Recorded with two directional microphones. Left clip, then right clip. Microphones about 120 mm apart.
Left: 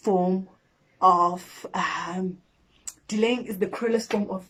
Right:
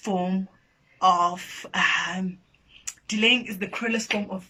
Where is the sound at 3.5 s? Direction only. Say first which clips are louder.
Left 3 dB; 40° left (ahead or behind).